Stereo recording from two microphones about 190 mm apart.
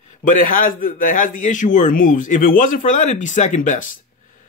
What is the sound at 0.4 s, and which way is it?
Speech, 45° left (ahead or behind).